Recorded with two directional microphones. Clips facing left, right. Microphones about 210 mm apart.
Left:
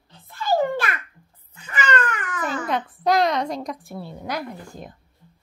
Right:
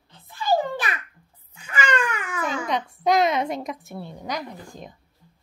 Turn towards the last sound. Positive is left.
turn(degrees=5)  # may be behind; listen again after turning